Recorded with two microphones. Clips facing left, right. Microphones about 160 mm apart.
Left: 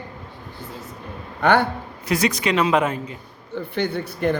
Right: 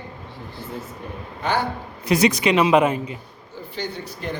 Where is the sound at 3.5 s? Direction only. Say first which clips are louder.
Left 6 dB; 60° left (ahead or behind).